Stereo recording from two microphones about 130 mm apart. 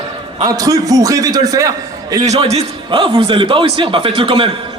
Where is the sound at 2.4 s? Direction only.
55° right (ahead or behind).